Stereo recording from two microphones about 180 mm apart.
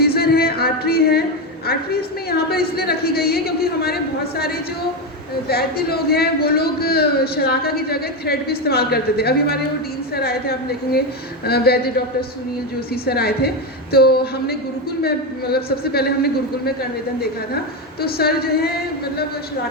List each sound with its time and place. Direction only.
0.0 s music: 60° left (ahead or behind)
1.6 s a man's voice: 60° left (ahead or behind)
12.9 s a man's voice: 60° left (ahead or behind)
18.0 s a man's voice: 60° left (ahead or behind)